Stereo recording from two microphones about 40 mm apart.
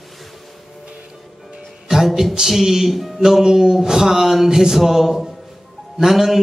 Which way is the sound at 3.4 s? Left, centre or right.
Centre.